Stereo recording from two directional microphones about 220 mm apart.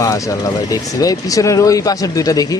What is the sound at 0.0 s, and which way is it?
Speech, 15° left (ahead or behind).